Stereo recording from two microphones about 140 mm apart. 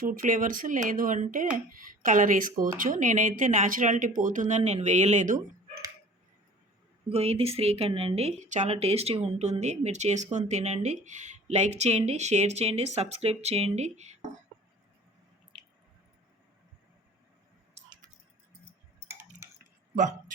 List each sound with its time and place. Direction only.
0.0 s a woman's voice: 75° right (ahead or behind); by 5.4 s 60° right (ahead or behind)
7.1 s speech: 45° right (ahead or behind)